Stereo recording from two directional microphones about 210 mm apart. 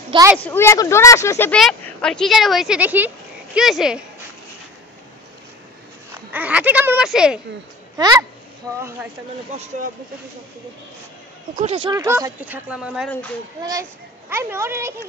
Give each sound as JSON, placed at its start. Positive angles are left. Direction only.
{"t": 0.1, "sound": "speech", "side_deg": -15}
{"t": 0.4, "sound": "speech", "side_deg": 10}
{"t": 6.3, "sound": "speech", "side_deg": -5}
{"t": 8.0, "sound": "speech", "side_deg": -15}
{"t": 11.5, "sound": "speech", "side_deg": -30}
{"t": 11.9, "sound": "speech", "side_deg": -15}
{"t": 14.3, "sound": "speech", "side_deg": -10}